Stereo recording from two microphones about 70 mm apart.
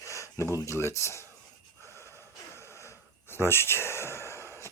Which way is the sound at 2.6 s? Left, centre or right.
Left.